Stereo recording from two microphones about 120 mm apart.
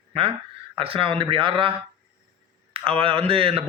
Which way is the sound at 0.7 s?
50° right (ahead or behind).